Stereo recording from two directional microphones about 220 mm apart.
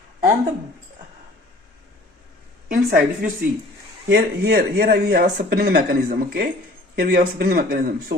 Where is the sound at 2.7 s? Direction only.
40° right (ahead or behind).